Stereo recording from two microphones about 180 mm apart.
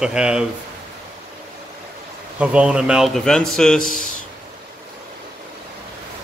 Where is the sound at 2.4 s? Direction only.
5° right (ahead or behind).